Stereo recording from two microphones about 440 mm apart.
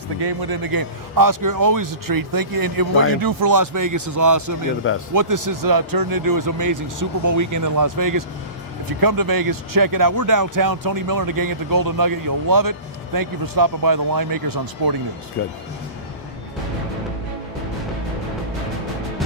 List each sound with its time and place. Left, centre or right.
0.2 s speech: right
15.4 s speech: left